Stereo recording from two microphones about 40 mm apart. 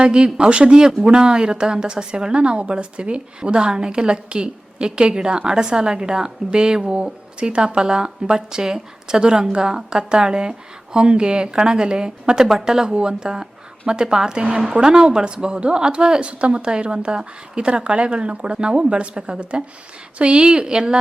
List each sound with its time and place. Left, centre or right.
0.0 s a woman's voice: right
12.9 s a woman's voice: right